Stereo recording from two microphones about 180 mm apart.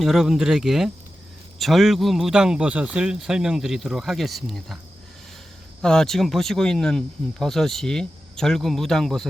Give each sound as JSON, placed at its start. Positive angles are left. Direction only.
{"t": 0.0, "sound": "speech", "side_deg": 0}
{"t": 5.8, "sound": "speech", "side_deg": 5}